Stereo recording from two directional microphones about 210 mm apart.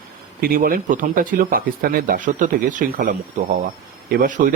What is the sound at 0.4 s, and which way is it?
Speech, 45° right (ahead or behind).